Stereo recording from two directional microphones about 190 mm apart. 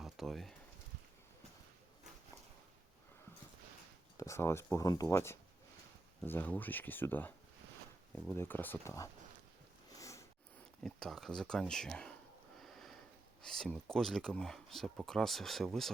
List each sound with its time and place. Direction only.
0.0 s a sound: centre (ahead or behind)
4.2 s speech: 15° left (ahead or behind)
9.9 s a sound: 15° left (ahead or behind)
10.8 s speech: centre (ahead or behind)
12.5 s sniff: centre (ahead or behind)
13.4 s speech: centre (ahead or behind)